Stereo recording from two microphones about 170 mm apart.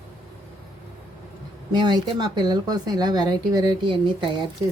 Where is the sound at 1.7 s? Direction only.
25° right (ahead or behind).